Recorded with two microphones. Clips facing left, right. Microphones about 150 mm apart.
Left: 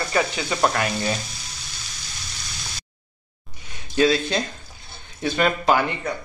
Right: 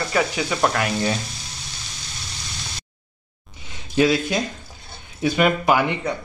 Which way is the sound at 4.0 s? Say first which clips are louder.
Right 1 dB; 15° right (ahead or behind).